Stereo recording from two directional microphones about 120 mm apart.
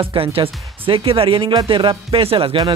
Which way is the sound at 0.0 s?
50° right (ahead or behind).